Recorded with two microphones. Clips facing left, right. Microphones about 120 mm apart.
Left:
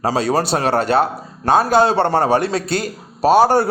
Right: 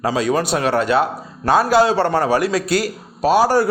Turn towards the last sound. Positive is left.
turn(degrees=25)  # may be behind; listen again after turning